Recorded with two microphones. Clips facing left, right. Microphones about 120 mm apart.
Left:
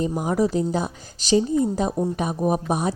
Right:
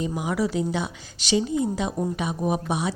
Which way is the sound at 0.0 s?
40° left (ahead or behind).